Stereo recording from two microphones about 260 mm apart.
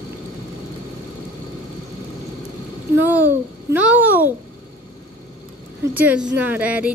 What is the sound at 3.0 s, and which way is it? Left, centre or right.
Babbling, centre.